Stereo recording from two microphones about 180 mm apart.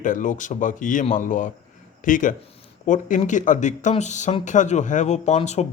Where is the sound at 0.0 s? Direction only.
45° left (ahead or behind).